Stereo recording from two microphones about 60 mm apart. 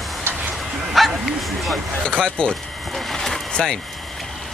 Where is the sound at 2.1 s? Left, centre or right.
Centre.